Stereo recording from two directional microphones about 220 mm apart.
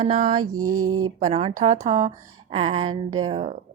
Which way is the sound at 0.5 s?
80° right.